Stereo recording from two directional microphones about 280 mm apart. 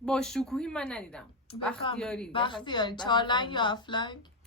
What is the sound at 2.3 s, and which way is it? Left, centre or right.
Speech, centre.